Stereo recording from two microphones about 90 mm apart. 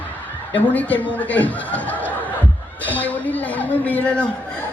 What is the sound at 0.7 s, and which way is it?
Speech, 20° left (ahead or behind).